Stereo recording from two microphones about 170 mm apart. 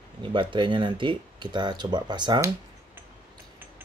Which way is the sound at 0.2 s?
30° right (ahead or behind).